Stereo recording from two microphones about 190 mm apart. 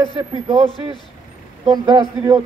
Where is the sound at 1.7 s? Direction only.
20° right (ahead or behind).